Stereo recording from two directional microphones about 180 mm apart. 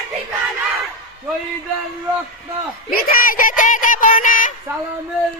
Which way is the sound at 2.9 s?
55° left (ahead or behind).